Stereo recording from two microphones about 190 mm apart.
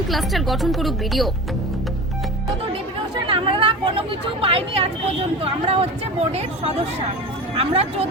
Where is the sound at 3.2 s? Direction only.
25° right (ahead or behind).